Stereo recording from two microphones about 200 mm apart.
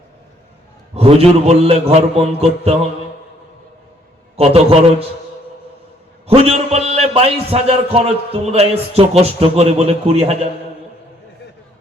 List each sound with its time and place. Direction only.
0.9 s a man's voice: 30° right (ahead or behind)
4.4 s a man's voice: 30° right (ahead or behind)
6.2 s a man's voice: 30° right (ahead or behind)